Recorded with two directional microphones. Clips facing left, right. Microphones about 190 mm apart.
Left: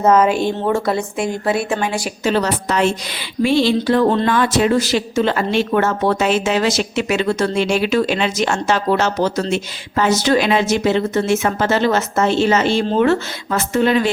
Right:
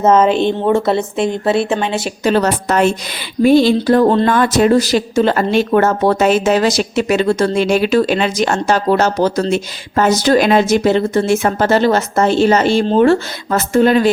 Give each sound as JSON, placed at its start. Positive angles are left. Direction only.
{"t": 0.0, "sound": "a woman's voice", "side_deg": -25}
{"t": 2.2, "sound": "a woman's voice", "side_deg": -50}